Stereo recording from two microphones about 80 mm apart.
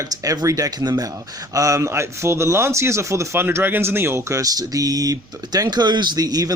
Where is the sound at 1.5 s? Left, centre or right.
Right.